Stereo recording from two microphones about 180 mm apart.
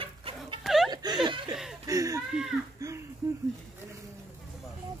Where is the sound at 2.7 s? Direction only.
15° right (ahead or behind).